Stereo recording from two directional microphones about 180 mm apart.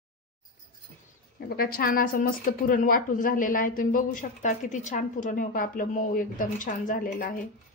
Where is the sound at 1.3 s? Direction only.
55° left (ahead or behind).